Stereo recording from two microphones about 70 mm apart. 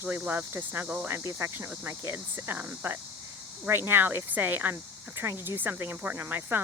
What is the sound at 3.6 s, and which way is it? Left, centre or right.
Speech, right.